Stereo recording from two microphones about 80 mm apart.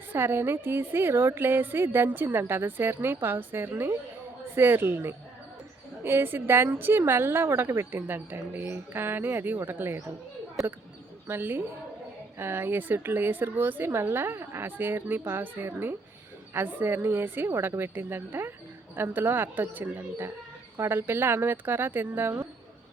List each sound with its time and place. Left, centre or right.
0.1 s a woman's voice: right
11.3 s a woman's voice: right